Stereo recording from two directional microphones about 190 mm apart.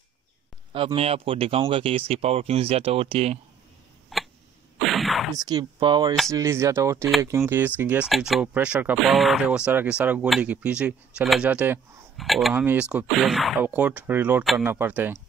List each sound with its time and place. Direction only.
0.7 s speech: 30° right (ahead or behind)
4.1 s a sound: centre (ahead or behind)
4.7 s sneeze: centre (ahead or behind)
5.3 s speech: 20° right (ahead or behind)